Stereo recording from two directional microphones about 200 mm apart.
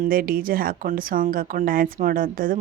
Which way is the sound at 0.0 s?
45° right (ahead or behind).